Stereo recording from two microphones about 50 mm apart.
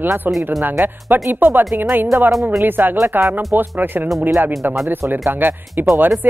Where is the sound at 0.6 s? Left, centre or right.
Right.